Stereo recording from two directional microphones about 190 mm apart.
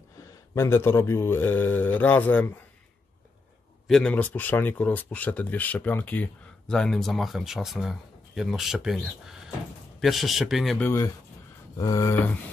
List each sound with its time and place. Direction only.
0.6 s speech: 10° left (ahead or behind)
3.8 s speech: 5° left (ahead or behind)
11.7 s speech: 15° left (ahead or behind)